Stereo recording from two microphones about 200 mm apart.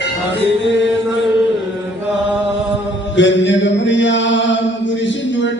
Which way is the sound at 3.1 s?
65° left (ahead or behind).